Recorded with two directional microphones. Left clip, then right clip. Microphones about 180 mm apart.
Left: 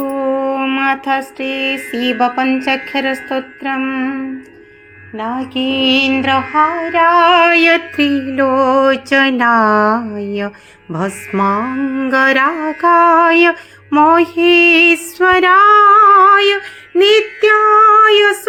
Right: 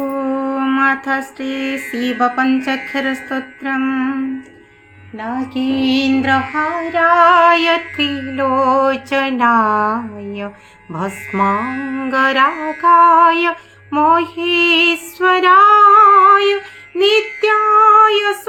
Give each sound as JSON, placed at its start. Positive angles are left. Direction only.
{"t": 0.1, "sound": "mantra", "side_deg": 10}
{"t": 2.2, "sound": "a woman's voice", "side_deg": 20}
{"t": 6.9, "sound": "music", "side_deg": 15}